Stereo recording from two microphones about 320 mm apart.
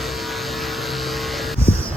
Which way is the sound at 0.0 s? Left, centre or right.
Centre.